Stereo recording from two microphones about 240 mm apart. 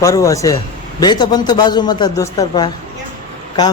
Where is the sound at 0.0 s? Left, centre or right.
Centre.